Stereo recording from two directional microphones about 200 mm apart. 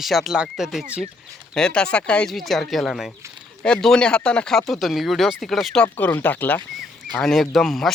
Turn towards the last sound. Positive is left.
turn(degrees=0)  # may be behind; listen again after turning